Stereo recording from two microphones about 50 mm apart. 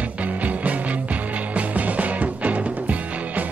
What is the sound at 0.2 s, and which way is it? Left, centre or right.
Music, right.